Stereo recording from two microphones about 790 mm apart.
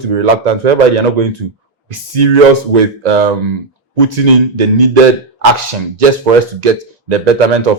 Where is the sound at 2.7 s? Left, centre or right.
Right.